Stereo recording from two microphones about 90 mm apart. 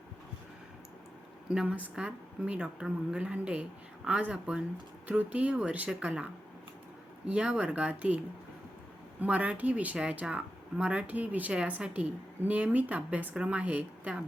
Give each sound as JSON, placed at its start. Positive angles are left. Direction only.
{"t": 1.5, "sound": "speech", "side_deg": -15}
{"t": 9.2, "sound": "speech", "side_deg": -15}